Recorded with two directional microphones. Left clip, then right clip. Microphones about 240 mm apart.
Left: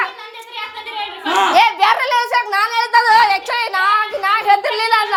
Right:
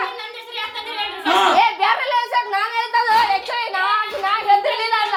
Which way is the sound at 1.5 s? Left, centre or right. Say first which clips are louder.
Left 4 dB; left.